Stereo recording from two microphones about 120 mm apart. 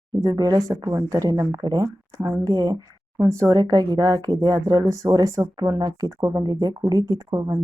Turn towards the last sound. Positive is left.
turn(degrees=-25)  # may be behind; listen again after turning